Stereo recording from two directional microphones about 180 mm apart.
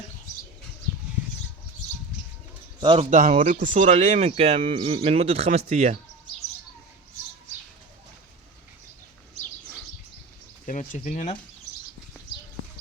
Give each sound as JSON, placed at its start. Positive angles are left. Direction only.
{"t": 2.8, "sound": "speech", "side_deg": -30}
{"t": 3.1, "sound": "speech", "side_deg": -45}
{"t": 10.7, "sound": "speech", "side_deg": 45}